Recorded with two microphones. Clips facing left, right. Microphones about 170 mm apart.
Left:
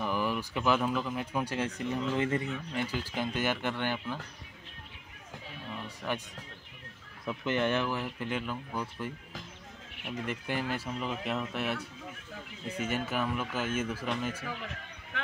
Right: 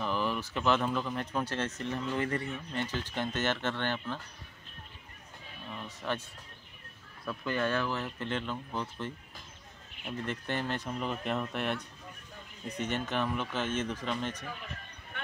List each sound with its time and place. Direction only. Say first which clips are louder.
0.0 s speech: left 1 dB; 10° left (ahead or behind)
5.9 s music: even; 10° left (ahead or behind)
7.2 s speech: left 2 dB; 20° left (ahead or behind)
10.2 s speech: left 1 dB; 10° left (ahead or behind)
14.4 s a man's voice: left 4 dB; 90° left
15.1 s a sound: left 4 dB; 90° left